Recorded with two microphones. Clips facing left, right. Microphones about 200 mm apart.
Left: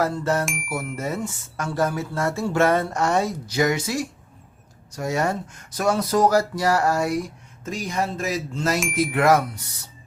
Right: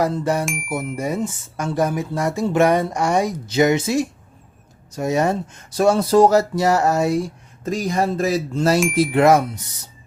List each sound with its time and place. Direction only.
0.0 s speech: 15° right (ahead or behind)
0.4 s bicycle bell: centre (ahead or behind)
0.7 s speech: 20° right (ahead or behind)